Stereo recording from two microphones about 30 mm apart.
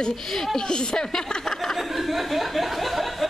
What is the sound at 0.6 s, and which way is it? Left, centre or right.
Speech, left.